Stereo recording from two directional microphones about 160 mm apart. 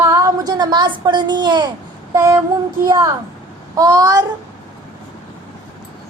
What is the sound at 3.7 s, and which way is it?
Speech, 25° right (ahead or behind).